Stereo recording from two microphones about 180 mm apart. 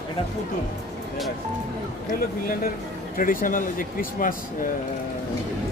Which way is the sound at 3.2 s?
50° left (ahead or behind).